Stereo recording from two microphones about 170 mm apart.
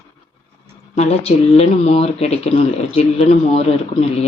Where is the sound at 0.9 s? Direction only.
40° left (ahead or behind).